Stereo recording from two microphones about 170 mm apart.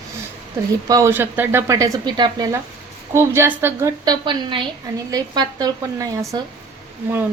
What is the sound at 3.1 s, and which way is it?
A woman's voice, 15° right (ahead or behind).